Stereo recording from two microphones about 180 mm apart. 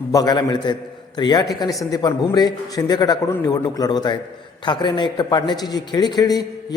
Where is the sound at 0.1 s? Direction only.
20° left (ahead or behind).